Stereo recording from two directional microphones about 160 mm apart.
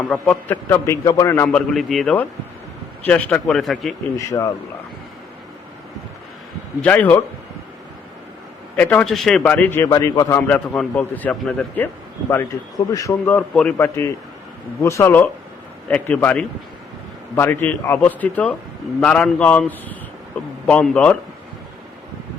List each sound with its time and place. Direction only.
0.1 s a man's voice: 10° left (ahead or behind)
1.7 s speech: centre (ahead or behind)
4.2 s a man's voice: 20° left (ahead or behind)
6.8 s a man's voice: 10° left (ahead or behind)
8.7 s a man's voice: 10° left (ahead or behind)
12.3 s a man's voice: 20° left (ahead or behind)
13.5 s a man's voice: 5° left (ahead or behind)